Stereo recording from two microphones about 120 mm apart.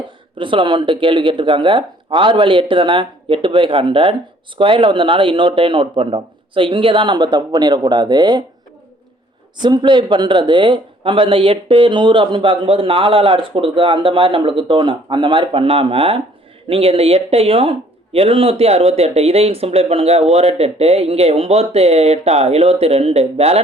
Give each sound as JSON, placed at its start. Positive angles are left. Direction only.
{"t": 0.3, "sound": "speech", "side_deg": -45}
{"t": 9.6, "sound": "speech", "side_deg": -40}